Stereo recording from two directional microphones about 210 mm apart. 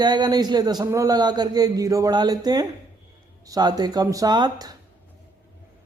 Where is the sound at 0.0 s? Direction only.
20° right (ahead or behind).